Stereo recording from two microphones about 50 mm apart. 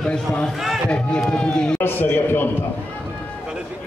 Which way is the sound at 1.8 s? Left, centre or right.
Left.